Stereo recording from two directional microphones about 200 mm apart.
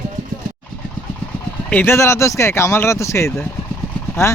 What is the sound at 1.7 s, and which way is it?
Speech, 10° left (ahead or behind).